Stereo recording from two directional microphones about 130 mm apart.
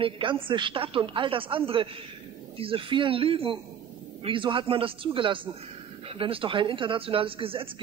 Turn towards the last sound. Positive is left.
turn(degrees=-45)  # may be behind; listen again after turning